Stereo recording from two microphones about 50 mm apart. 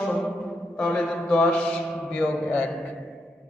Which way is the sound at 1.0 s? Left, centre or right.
Centre.